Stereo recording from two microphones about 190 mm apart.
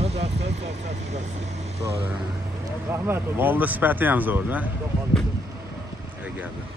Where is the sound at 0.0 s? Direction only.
35° right (ahead or behind).